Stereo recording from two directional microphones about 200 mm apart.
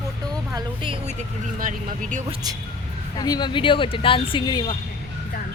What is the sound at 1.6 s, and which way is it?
Speech, 40° right (ahead or behind).